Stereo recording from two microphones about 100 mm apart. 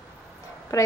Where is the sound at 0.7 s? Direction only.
30° left (ahead or behind).